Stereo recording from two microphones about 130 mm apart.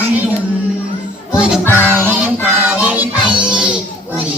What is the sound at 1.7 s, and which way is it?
Music, 15° left (ahead or behind).